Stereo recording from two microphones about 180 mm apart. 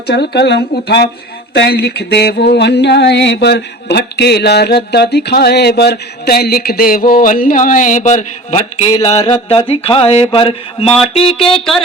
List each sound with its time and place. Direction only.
0.1 s mantra: 65° left (ahead or behind)
7.1 s a sound: 50° left (ahead or behind)
9.0 s mantra: 30° left (ahead or behind)